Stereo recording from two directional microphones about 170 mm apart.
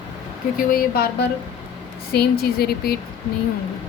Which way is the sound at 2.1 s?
65° left (ahead or behind).